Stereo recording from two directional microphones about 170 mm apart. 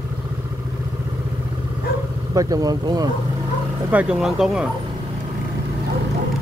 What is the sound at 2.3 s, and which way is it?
Speech, 20° right (ahead or behind).